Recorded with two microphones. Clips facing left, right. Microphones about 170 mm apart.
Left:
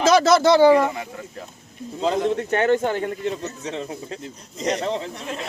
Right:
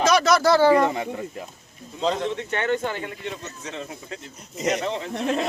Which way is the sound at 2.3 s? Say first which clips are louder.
Left 6 dB; 45° left (ahead or behind).